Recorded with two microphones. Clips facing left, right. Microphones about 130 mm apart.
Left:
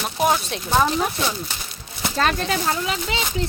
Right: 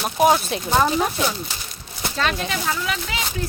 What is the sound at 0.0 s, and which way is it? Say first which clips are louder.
Speech: right 3 dB; 5° right (ahead or behind).